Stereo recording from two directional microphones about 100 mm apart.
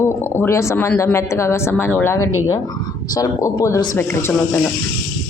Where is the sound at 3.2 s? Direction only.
35° left (ahead or behind).